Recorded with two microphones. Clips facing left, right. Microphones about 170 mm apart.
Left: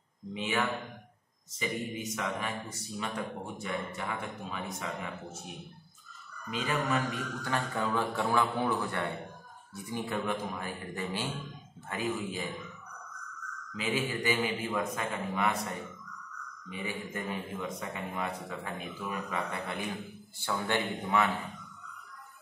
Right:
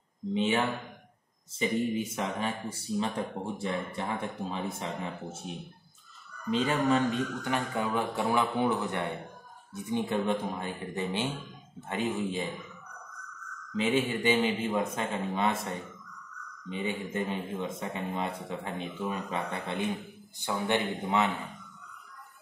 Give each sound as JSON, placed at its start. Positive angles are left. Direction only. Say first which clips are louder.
{"t": 0.3, "sound": "a man's voice", "louder": "right 4 dB", "side_deg": -30}
{"t": 6.5, "sound": "a man's voice", "louder": "right 5 dB", "side_deg": -30}
{"t": 13.7, "sound": "a man's voice", "louder": "right 5 dB", "side_deg": -25}